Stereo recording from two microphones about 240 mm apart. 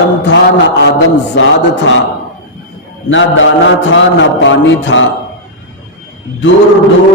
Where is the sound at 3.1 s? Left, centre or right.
Left.